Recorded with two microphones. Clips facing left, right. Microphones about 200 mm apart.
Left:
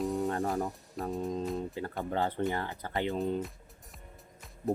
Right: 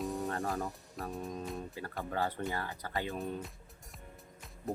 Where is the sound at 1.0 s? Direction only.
Centre (ahead or behind).